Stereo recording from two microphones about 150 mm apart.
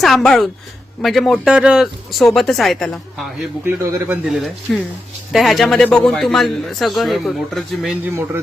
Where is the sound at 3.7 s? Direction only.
15° right (ahead or behind).